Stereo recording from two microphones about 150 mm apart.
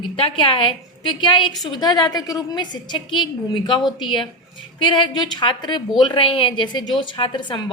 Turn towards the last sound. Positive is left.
turn(degrees=30)  # may be behind; listen again after turning